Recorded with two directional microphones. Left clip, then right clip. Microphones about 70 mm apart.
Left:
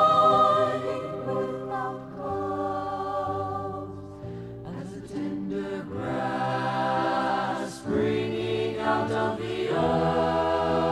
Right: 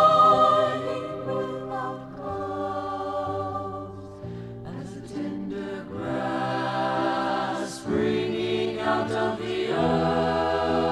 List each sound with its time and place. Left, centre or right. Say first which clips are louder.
0.0 s music: right 2 dB; right
5.1 s music: left 1 dB; right